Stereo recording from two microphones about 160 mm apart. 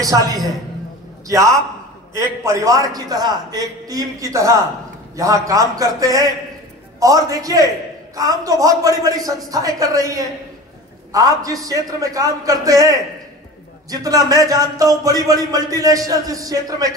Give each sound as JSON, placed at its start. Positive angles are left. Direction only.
{"t": 0.0, "sound": "a man's voice", "side_deg": -20}